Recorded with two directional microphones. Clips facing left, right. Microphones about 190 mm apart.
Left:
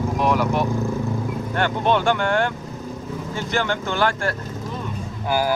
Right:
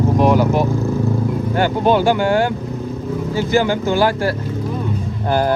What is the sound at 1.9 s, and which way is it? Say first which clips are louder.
Speech: right 5 dB; 5° right (ahead or behind).